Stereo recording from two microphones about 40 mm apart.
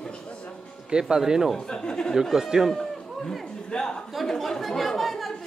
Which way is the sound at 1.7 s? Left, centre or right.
Centre.